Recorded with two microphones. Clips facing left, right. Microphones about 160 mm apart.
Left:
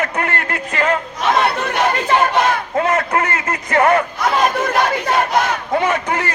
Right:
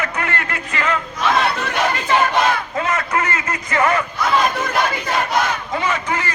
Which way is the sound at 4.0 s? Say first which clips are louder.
Left 2 dB; 60° left (ahead or behind).